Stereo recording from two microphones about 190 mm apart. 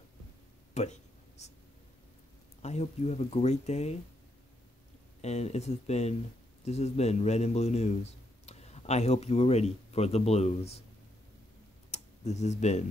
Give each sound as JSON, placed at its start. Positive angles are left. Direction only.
{"t": 0.8, "sound": "speech", "side_deg": 35}
{"t": 1.4, "sound": "a sound", "side_deg": 35}
{"t": 2.6, "sound": "speech", "side_deg": 35}
{"t": 5.2, "sound": "a man's voice", "side_deg": 35}
{"t": 11.9, "sound": "tick-tock", "side_deg": 35}